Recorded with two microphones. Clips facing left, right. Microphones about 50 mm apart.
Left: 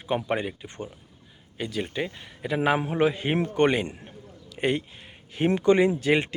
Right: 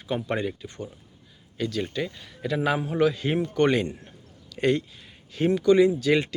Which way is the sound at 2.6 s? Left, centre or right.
Left.